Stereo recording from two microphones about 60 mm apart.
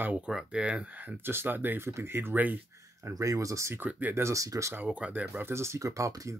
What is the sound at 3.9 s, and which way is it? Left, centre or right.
Speech, right.